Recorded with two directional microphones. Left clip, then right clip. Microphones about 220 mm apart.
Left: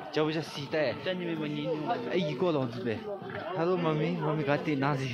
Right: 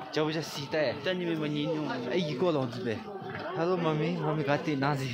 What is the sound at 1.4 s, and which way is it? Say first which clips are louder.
Speech: right 2 dB; 30° right (ahead or behind).